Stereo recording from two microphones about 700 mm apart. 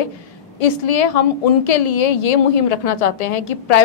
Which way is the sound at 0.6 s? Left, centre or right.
Left.